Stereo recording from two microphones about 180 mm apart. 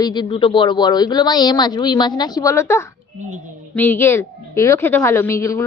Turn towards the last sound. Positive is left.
turn(degrees=15)  # may be behind; listen again after turning